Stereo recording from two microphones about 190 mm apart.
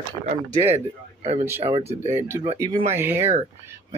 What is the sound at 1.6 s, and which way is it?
Speech, 30° right (ahead or behind).